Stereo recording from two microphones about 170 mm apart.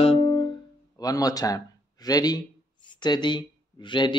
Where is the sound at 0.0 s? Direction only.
35° left (ahead or behind).